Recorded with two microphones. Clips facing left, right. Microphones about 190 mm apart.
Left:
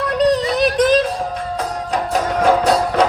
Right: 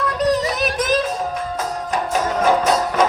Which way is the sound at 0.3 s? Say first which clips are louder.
Left 3 dB; 30° left (ahead or behind).